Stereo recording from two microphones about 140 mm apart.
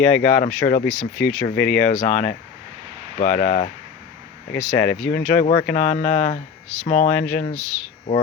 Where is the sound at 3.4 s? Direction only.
75° left (ahead or behind).